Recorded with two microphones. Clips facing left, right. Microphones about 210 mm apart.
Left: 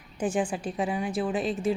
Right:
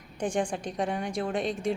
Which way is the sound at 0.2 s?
5° left (ahead or behind).